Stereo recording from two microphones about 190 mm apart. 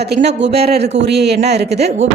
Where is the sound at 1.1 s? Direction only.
60° right (ahead or behind).